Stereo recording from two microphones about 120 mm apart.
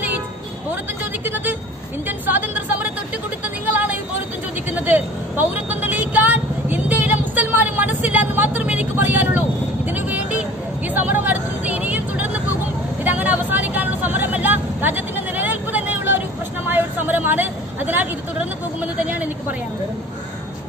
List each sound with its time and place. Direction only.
1.2 s a woman's voice: 15° right (ahead or behind)
3.4 s a sound: 15° right (ahead or behind)
4.7 s vehicle: 15° right (ahead or behind)